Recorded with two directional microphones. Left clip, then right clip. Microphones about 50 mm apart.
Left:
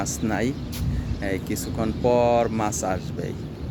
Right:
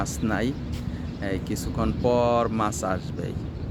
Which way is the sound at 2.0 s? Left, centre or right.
Centre.